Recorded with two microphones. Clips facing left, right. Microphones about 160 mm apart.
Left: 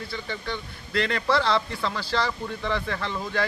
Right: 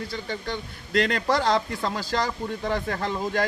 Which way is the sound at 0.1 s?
45° right (ahead or behind).